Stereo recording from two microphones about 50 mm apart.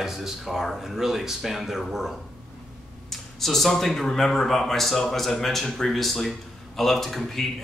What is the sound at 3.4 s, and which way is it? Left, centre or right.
Speech, centre.